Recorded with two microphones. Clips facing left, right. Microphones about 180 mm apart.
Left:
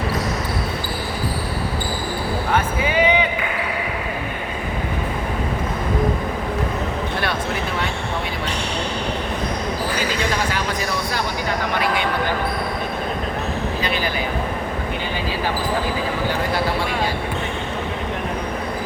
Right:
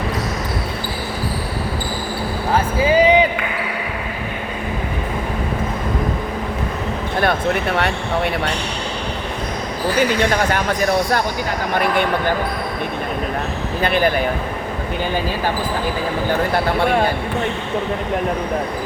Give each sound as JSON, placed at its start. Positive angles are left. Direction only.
{"t": 2.5, "sound": "a sound", "side_deg": -35}
{"t": 7.8, "sound": "speech", "side_deg": -70}
{"t": 13.8, "sound": "speech", "side_deg": -55}